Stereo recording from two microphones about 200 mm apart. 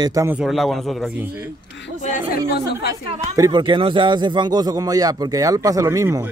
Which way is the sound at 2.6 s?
55° left (ahead or behind).